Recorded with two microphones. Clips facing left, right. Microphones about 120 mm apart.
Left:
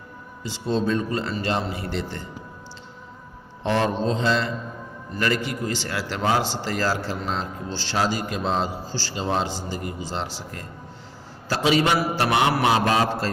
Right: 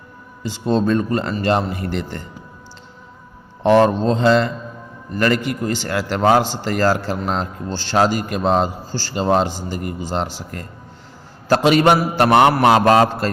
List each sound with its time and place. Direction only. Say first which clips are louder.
0.4 s a man's voice: right 6 dB; 50° right (ahead or behind)
3.6 s mantra: right 9 dB; 55° right (ahead or behind)
5.1 s a man's voice: right 6 dB; 55° right (ahead or behind)
11.4 s mantra: right 7 dB; 60° right (ahead or behind)